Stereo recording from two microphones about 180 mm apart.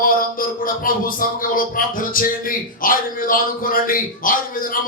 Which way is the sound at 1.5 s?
50° left (ahead or behind).